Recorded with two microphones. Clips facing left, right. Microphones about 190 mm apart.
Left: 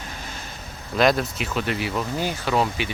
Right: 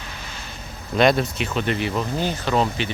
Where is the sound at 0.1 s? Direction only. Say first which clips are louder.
Left 1 dB; 45° left (ahead or behind).